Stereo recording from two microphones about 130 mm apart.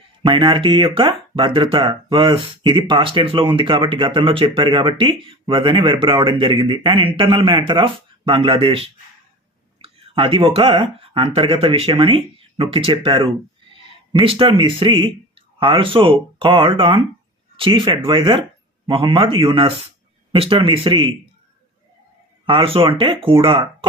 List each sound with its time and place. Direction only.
0.2 s speech: 40° right (ahead or behind)
22.4 s speech: 45° right (ahead or behind)